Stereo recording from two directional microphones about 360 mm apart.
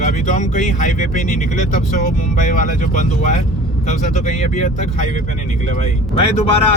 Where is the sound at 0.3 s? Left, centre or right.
Left.